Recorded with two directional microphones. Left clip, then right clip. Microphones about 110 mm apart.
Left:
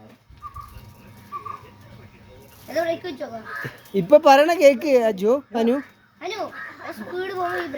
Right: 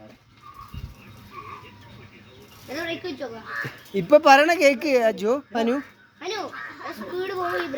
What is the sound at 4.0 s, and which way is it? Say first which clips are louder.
Speech: left 1 dB; 50° left (ahead or behind).